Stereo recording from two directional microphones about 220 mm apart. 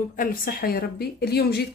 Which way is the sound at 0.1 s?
40° left (ahead or behind).